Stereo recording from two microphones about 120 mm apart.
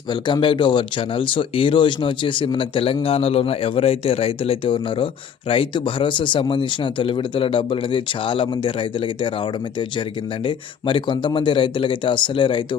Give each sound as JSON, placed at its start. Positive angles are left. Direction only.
{"t": 0.1, "sound": "speech", "side_deg": 40}